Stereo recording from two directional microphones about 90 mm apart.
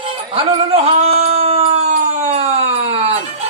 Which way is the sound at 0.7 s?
90° right.